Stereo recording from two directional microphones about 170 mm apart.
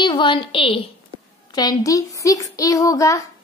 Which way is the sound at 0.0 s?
25° left (ahead or behind).